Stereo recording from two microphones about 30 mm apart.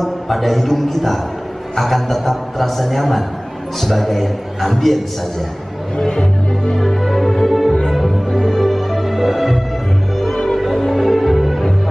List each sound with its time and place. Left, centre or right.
0.0 s a man's voice: centre
5.9 s speech: left
6.8 s music: centre
10.1 s music: centre
10.6 s music: centre